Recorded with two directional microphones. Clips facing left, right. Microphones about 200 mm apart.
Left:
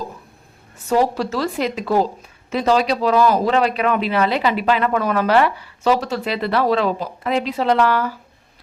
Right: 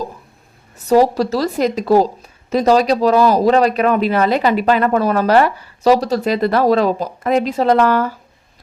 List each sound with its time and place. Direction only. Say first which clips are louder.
0.9 s speech: right 5 dB; 40° right (ahead or behind)